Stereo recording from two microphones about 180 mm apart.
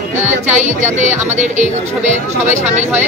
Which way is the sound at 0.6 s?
40° right (ahead or behind).